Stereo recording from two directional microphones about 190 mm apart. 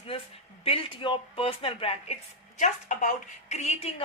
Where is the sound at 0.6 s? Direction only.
30° left (ahead or behind).